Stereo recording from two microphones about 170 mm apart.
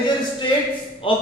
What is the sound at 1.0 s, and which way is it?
Speech, 30° left (ahead or behind).